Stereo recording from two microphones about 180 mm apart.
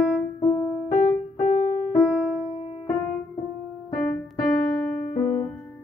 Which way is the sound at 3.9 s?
5° left (ahead or behind).